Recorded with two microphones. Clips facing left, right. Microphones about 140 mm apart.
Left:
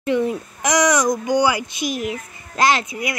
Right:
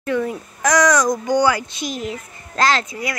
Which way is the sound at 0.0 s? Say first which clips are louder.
Left 2 dB; 20° left (ahead or behind).